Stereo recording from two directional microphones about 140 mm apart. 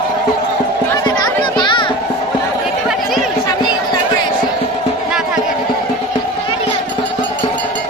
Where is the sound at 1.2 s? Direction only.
35° left (ahead or behind).